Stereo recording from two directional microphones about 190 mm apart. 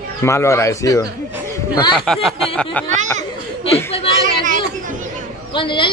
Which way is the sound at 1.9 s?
Centre (ahead or behind).